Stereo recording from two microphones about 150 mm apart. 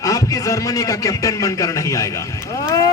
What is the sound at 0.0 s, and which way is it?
A man's voice, 20° left (ahead or behind).